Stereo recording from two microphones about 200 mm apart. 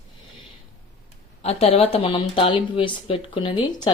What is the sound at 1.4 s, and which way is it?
Speech, 30° left (ahead or behind).